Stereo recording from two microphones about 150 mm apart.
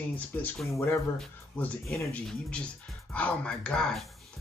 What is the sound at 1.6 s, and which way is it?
Speech, 10° left (ahead or behind).